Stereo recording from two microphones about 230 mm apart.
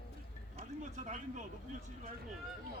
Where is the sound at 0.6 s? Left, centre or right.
Right.